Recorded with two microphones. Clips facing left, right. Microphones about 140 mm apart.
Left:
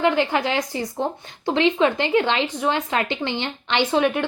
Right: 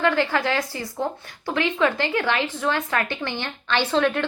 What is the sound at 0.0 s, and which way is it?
A woman's voice, 20° left (ahead or behind).